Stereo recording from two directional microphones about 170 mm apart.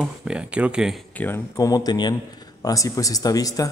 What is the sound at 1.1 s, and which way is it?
Speech, 10° left (ahead or behind).